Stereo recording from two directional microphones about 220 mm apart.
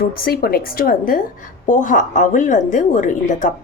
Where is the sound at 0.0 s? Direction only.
40° left (ahead or behind).